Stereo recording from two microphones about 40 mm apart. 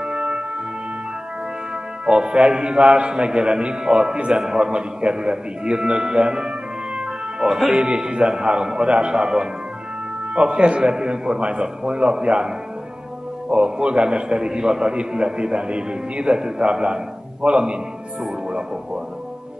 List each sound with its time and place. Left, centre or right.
0.0 s music: centre
2.0 s a man's voice: right
7.0 s music: centre
7.8 s a man's voice: right